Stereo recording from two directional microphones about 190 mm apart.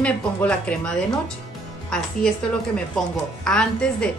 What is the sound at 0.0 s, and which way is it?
Speech, 5° left (ahead or behind).